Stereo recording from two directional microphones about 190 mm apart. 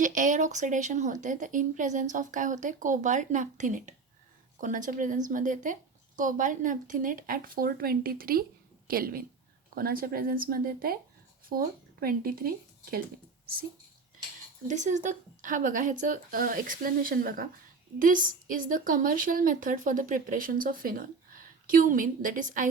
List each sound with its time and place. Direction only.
0.0 s a woman's voice: 40° right (ahead or behind)
14.7 s a woman's voice: 40° right (ahead or behind)